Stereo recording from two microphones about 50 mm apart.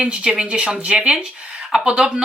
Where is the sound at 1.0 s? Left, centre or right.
Centre.